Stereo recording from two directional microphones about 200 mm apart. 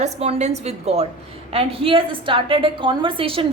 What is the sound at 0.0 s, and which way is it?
A woman's voice, 35° right (ahead or behind).